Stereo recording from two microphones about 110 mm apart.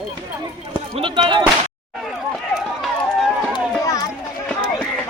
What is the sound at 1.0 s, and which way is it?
Music, 50° right (ahead or behind).